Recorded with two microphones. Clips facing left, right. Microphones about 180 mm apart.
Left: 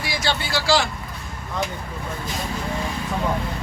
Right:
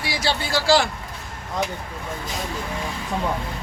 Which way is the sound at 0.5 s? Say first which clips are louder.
Right 3 dB; 50° right (ahead or behind).